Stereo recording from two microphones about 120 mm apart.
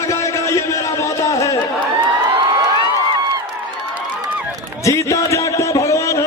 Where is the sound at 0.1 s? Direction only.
25° left (ahead or behind).